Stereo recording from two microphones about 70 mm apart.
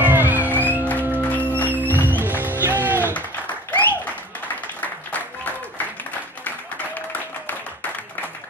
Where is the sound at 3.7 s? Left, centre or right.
Left.